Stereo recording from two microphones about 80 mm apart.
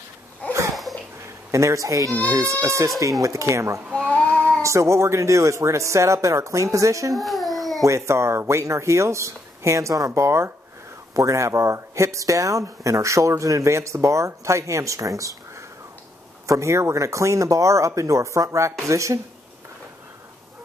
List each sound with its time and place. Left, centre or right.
0.4 s a sound: centre
1.5 s speech: right
4.1 s child singing: centre
4.6 s speech: right
7.2 s baby cry: centre
7.8 s speech: right